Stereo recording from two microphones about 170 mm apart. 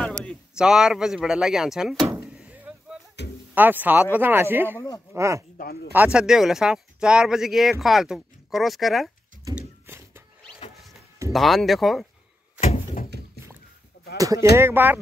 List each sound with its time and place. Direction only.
0.6 s speech: 5° right (ahead or behind)
2.3 s a sound: 10° right (ahead or behind)
3.5 s speech: 10° right (ahead or behind)
5.9 s speech: 5° right (ahead or behind)
9.6 s a sound: 15° right (ahead or behind)
11.3 s speech: centre (ahead or behind)
12.5 s door: 45° left (ahead or behind)
14.1 s speech: 20° right (ahead or behind)